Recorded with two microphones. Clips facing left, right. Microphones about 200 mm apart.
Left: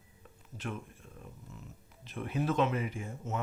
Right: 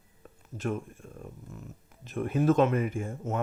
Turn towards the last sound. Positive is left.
turn(degrees=-50)  # may be behind; listen again after turning